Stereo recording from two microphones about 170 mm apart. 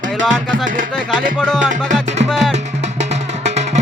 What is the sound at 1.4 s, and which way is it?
Music, 5° left (ahead or behind).